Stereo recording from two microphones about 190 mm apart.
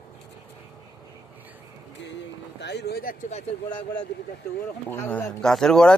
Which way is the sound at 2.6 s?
65° left (ahead or behind).